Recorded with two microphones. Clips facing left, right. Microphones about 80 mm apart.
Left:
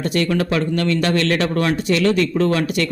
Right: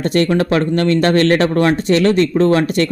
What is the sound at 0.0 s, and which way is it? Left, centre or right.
Speech, right.